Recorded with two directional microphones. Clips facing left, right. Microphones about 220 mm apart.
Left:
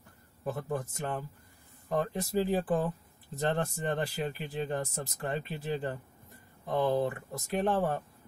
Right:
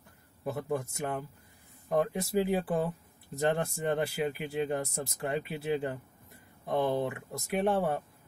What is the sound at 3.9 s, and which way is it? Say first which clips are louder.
Speech: right 3 dB; 10° right (ahead or behind).